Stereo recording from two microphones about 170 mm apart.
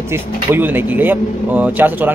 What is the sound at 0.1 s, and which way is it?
Speech, 10° right (ahead or behind).